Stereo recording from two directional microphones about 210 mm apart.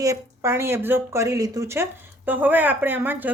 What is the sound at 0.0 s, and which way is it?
Speech, 15° right (ahead or behind).